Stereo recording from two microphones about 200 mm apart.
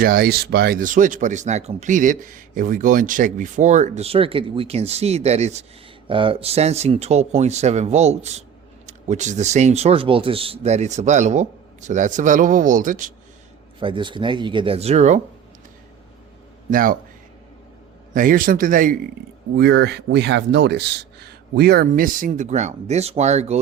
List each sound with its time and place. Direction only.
0.0 s speech: 50° right (ahead or behind)
13.7 s speech: 25° right (ahead or behind)
16.6 s speech: 45° right (ahead or behind)
18.1 s speech: 45° right (ahead or behind)
19.5 s speech: 55° right (ahead or behind); by 23.6 s 35° right (ahead or behind)